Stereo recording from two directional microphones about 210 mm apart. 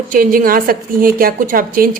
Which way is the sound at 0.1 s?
40° right (ahead or behind).